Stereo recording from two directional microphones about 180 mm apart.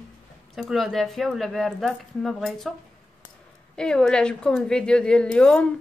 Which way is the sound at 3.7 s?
5° left (ahead or behind).